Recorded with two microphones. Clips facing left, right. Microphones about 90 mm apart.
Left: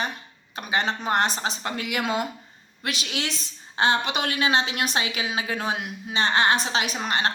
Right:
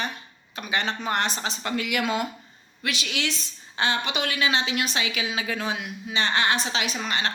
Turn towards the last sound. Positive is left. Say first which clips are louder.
# left 2 dB
turn(degrees=40)  # may be behind; listen again after turning